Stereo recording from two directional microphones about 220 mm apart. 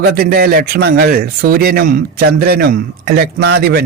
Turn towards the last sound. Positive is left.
turn(degrees=-45)  # may be behind; listen again after turning